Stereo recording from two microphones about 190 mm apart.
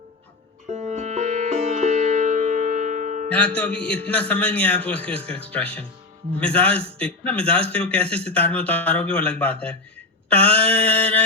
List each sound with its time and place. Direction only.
0.7 s music: 35° right (ahead or behind)
3.3 s a man's voice: 5° left (ahead or behind)